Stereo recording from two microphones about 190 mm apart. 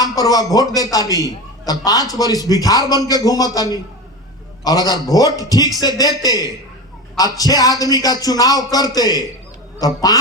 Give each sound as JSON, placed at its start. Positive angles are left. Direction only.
{"t": 0.0, "sound": "a man's voice", "side_deg": 20}